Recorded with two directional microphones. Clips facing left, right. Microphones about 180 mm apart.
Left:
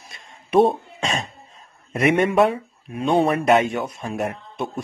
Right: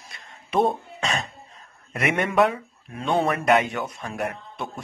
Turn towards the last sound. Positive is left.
turn(degrees=25)  # may be behind; listen again after turning